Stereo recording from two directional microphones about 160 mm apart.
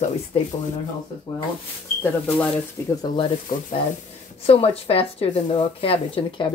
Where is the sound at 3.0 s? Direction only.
30° left (ahead or behind).